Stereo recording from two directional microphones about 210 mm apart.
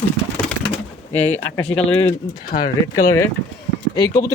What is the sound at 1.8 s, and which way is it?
Speech, 30° left (ahead or behind).